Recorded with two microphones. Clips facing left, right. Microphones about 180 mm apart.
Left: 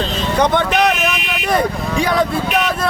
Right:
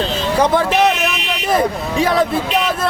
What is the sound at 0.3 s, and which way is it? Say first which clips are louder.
Speech: right 1 dB; 5° right (ahead or behind).